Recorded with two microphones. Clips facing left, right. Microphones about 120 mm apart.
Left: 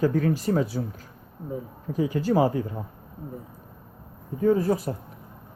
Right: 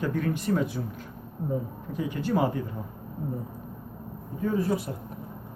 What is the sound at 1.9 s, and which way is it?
Speech, 40° left (ahead or behind).